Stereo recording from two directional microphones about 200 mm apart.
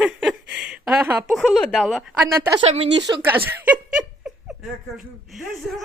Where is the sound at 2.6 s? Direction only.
25° right (ahead or behind).